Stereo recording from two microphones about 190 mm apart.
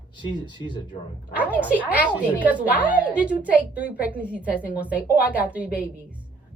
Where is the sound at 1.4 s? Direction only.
10° right (ahead or behind).